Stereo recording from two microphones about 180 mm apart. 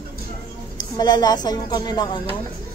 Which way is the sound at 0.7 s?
20° left (ahead or behind).